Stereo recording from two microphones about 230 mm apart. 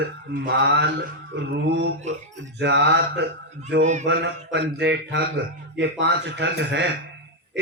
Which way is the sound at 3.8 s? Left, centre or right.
Right.